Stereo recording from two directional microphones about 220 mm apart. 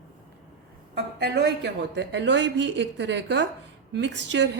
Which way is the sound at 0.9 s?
50° right (ahead or behind).